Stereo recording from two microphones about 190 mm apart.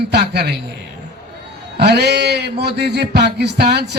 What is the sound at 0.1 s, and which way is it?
Speech, 60° right (ahead or behind).